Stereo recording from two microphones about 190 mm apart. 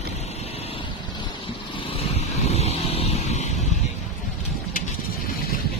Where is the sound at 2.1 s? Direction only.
35° left (ahead or behind).